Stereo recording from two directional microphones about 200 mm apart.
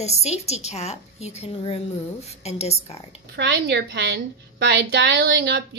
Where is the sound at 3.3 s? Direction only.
60° right (ahead or behind).